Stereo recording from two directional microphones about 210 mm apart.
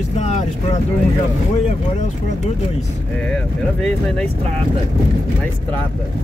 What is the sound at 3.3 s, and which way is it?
Speech, centre (ahead or behind).